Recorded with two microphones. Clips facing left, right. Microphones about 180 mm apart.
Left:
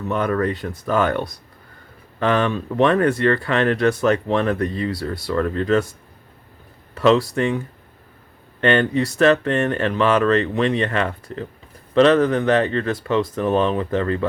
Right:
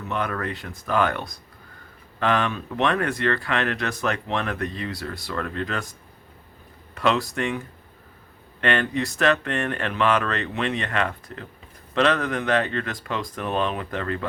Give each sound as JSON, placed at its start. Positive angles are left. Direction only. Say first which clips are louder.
{"t": 0.1, "sound": "speech", "louder": "left 7 dB", "side_deg": 35}
{"t": 2.1, "sound": "speech", "louder": "left 4 dB", "side_deg": 35}
{"t": 6.9, "sound": "speech", "louder": "left 7 dB", "side_deg": 30}
{"t": 8.6, "sound": "speech", "louder": "left 6 dB", "side_deg": 30}